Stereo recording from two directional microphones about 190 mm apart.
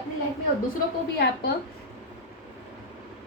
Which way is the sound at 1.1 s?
60° left (ahead or behind).